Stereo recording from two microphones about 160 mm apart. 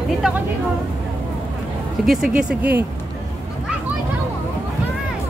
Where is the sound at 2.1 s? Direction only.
5° right (ahead or behind).